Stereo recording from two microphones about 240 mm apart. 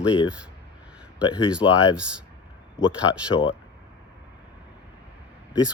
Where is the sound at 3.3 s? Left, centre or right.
Left.